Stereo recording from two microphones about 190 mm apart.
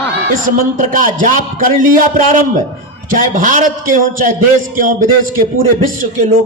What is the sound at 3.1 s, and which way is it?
A man's voice, 45° right (ahead or behind).